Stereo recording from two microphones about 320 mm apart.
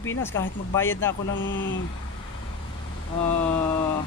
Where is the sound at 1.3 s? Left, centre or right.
Left.